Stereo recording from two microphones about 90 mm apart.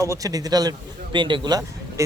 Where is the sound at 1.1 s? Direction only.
65° right (ahead or behind).